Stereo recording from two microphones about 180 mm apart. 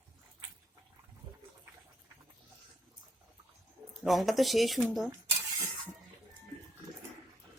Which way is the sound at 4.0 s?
Centre (ahead or behind).